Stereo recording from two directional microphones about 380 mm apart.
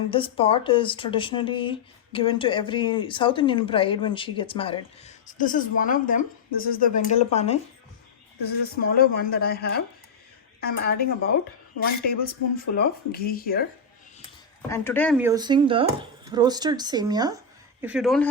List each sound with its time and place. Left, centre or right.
0.1 s speech: centre
14.7 s speech: centre